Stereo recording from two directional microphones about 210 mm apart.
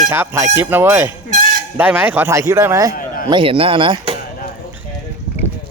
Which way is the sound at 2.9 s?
40° left (ahead or behind).